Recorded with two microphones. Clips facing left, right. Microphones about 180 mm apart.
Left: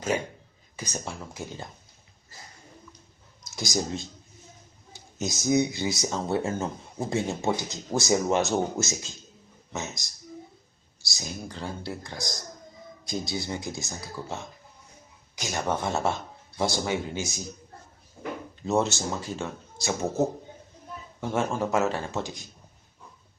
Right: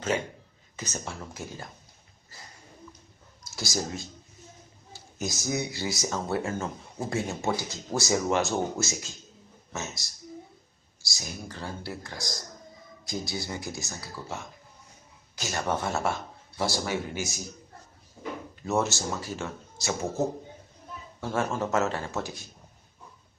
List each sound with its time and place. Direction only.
0.8 s speech: 15° left (ahead or behind)
3.4 s speech: 20° left (ahead or behind)
15.4 s speech: 15° left (ahead or behind)
18.6 s speech: 20° left (ahead or behind)